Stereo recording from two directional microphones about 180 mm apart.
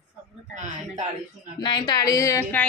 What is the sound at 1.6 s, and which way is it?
A woman's voice, 25° left (ahead or behind).